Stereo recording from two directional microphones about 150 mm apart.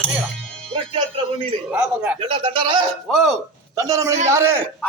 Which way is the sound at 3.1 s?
Centre (ahead or behind).